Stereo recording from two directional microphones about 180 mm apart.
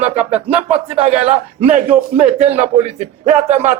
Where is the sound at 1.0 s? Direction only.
35° right (ahead or behind).